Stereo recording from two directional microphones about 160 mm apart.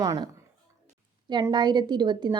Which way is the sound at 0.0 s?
20° right (ahead or behind).